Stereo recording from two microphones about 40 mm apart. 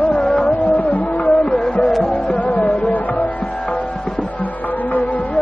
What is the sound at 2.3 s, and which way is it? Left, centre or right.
Music, left.